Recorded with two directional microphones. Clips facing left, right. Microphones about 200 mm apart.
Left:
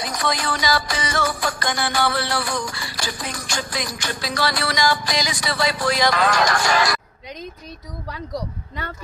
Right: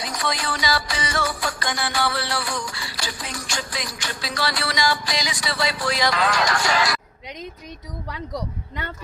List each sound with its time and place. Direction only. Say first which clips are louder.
0.0 s music: left 3 dB; 45° left (ahead or behind)